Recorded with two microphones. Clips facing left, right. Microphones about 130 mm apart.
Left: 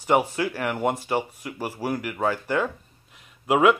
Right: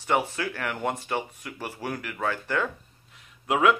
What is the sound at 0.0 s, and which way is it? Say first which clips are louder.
Speech: left 4 dB; 15° left (ahead or behind).